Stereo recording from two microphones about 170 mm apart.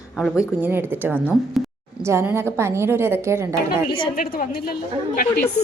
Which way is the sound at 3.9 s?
55° left (ahead or behind).